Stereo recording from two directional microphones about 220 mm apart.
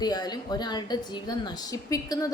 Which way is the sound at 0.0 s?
20° left (ahead or behind).